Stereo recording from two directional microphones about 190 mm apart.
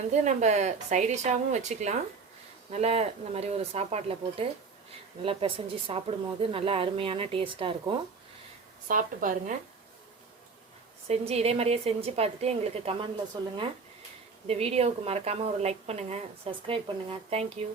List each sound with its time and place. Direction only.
0.1 s a woman's voice: 40° right (ahead or behind)
8.9 s speech: 45° right (ahead or behind)
11.1 s a woman's voice: 35° right (ahead or behind)